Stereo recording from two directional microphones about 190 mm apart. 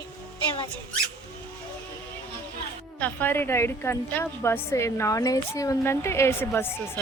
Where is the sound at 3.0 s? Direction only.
10° left (ahead or behind).